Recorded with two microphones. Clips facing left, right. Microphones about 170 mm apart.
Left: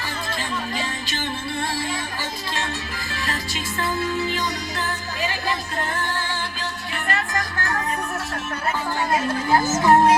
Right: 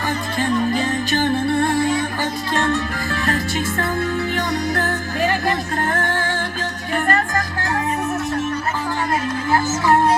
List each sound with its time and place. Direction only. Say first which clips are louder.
0.3 s music: right 11 dB; 50° right (ahead or behind)